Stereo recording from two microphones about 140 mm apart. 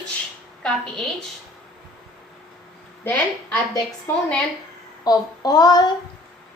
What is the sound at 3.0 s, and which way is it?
Speech, 10° left (ahead or behind).